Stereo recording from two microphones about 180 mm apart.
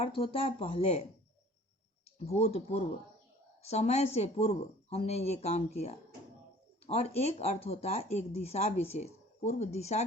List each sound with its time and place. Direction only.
0.0 s speech: 30° left (ahead or behind)
2.1 s speech: 35° left (ahead or behind)